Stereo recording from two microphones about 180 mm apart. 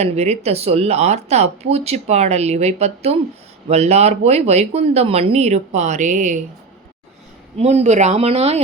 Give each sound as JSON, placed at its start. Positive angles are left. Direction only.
{"t": 0.0, "sound": "speech", "side_deg": -35}
{"t": 7.6, "sound": "speech", "side_deg": -40}